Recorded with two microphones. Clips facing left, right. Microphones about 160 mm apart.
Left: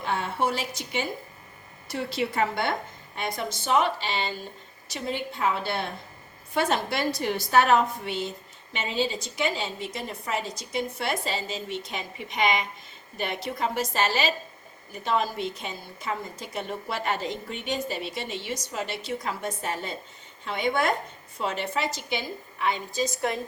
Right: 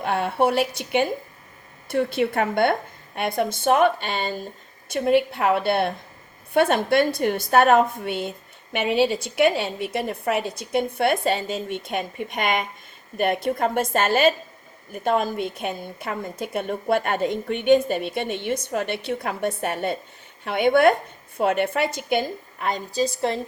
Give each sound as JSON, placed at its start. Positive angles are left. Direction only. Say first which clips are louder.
{"t": 0.0, "sound": "a woman's voice", "louder": "right 6 dB", "side_deg": -60}